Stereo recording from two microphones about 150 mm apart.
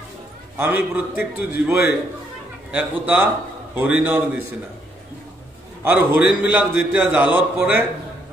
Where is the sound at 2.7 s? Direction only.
10° right (ahead or behind).